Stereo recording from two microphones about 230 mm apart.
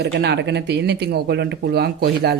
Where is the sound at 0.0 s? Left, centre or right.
Right.